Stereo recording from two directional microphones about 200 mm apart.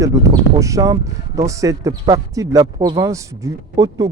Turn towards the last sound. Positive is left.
turn(degrees=-15)  # may be behind; listen again after turning